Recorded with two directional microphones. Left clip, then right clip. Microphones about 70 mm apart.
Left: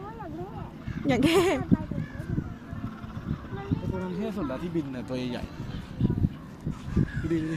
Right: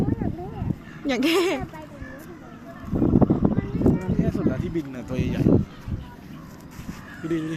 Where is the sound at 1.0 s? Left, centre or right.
Left.